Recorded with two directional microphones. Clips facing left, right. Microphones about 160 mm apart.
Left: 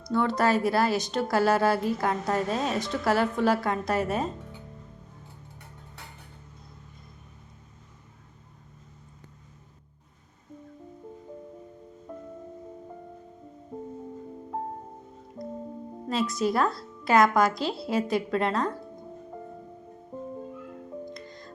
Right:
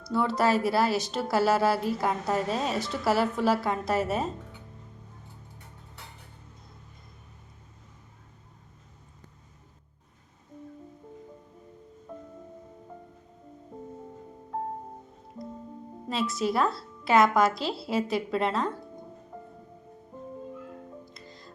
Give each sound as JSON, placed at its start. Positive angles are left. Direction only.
{"t": 0.0, "sound": "a woman's voice", "side_deg": -5}
{"t": 16.0, "sound": "a woman's voice", "side_deg": 0}
{"t": 21.1, "sound": "music", "side_deg": -5}